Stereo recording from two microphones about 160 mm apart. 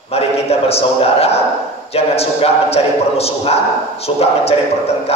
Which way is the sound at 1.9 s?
40° left (ahead or behind).